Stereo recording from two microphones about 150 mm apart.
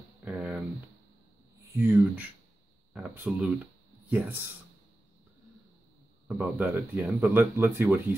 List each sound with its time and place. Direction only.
0.2 s a sound: 10° right (ahead or behind)
1.8 s speech: 15° right (ahead or behind)
6.2 s speech: 15° right (ahead or behind)